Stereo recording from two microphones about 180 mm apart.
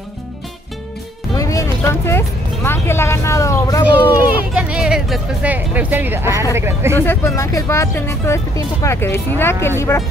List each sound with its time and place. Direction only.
1.3 s music: 20° left (ahead or behind)
4.6 s speech: 5° right (ahead or behind)
7.0 s speech: 15° left (ahead or behind)